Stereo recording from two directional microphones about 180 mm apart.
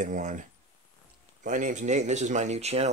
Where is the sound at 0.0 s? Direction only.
45° right (ahead or behind).